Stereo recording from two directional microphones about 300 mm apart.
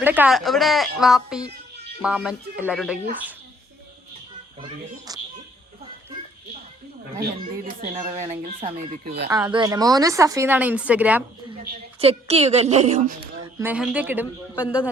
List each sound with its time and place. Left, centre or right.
0.0 s a woman's voice: centre
4.6 s speech: centre
7.6 s a woman's voice: right; by 11.2 s centre
11.9 s a woman's voice: centre
13.6 s a woman's voice: centre